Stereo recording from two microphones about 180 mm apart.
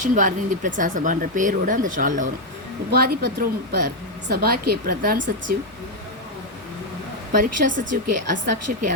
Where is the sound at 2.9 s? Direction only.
60° right (ahead or behind).